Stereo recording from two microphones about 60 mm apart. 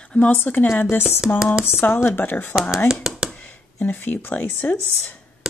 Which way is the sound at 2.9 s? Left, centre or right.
Centre.